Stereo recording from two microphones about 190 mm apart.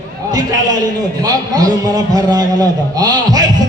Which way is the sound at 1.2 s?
20° right (ahead or behind).